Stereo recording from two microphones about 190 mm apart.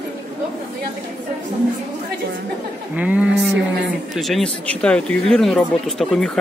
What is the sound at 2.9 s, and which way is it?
Speech, 5° right (ahead or behind).